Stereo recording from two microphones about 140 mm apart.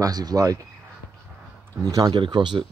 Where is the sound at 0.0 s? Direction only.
25° right (ahead or behind).